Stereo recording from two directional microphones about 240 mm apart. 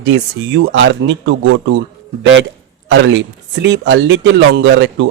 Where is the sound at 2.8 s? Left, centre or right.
Right.